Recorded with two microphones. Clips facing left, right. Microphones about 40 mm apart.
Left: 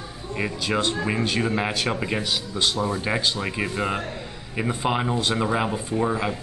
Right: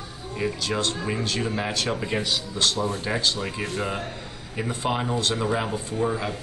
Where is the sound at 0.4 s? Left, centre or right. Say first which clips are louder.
Left 1 dB; centre.